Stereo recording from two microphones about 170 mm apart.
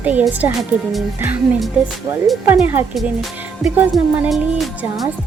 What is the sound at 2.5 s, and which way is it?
Speech, 15° right (ahead or behind).